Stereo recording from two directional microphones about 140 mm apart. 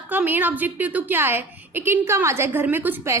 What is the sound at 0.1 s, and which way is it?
A woman's voice, 15° right (ahead or behind).